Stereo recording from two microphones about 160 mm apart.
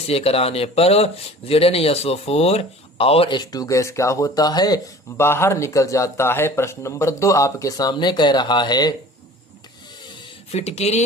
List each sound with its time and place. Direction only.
0.1 s speech: 40° left (ahead or behind)
10.5 s speech: 40° left (ahead or behind)